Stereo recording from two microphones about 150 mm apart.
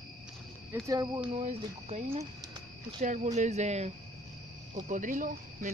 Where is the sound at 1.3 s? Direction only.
45° right (ahead or behind).